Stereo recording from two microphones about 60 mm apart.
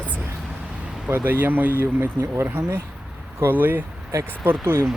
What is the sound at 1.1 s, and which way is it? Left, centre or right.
Speech, right.